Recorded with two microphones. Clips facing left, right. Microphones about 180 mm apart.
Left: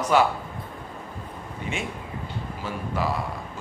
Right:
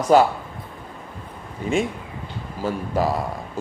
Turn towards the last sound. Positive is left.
turn(degrees=-40)  # may be behind; listen again after turning